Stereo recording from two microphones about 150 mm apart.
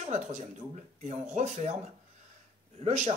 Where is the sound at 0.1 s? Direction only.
50° right (ahead or behind).